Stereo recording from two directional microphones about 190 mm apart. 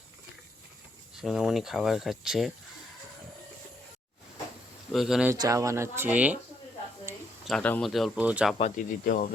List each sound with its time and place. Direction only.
1.1 s speech: centre (ahead or behind)
4.9 s speech: centre (ahead or behind)
5.3 s speech: 15° right (ahead or behind)
7.4 s speech: 5° left (ahead or behind)
8.5 s speech: 40° left (ahead or behind)